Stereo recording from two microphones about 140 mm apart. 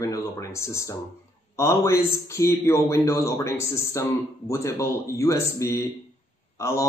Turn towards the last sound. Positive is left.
turn(degrees=20)  # may be behind; listen again after turning